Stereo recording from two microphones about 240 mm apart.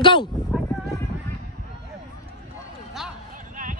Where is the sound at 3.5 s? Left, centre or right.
Right.